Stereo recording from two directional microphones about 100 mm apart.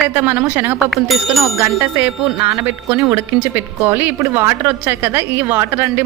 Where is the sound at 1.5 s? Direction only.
20° right (ahead or behind).